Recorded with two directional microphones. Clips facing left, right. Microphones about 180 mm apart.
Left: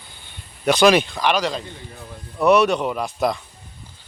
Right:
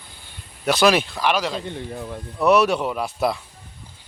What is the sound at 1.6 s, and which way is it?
Speech, 60° right (ahead or behind).